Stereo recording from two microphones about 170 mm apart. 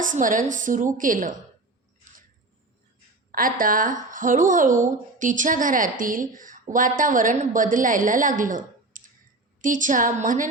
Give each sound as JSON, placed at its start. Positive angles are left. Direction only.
{"t": 0.0, "sound": "speech", "side_deg": -50}
{"t": 3.3, "sound": "speech", "side_deg": -55}